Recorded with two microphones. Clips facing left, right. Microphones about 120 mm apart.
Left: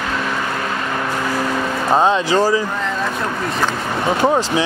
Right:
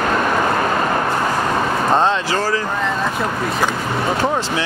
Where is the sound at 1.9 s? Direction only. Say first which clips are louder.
Left 3 dB; 15° left (ahead or behind).